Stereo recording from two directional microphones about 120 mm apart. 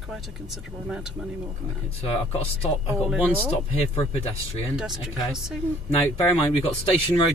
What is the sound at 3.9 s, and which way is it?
Speech, 55° left (ahead or behind).